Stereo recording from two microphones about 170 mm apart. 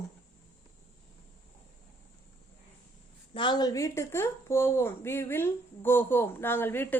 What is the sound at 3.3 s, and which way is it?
A woman's voice, 25° left (ahead or behind).